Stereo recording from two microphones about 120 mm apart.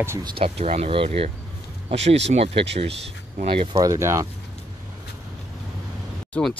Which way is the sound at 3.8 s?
25° right (ahead or behind).